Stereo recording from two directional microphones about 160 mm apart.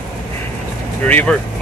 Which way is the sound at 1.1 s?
10° left (ahead or behind).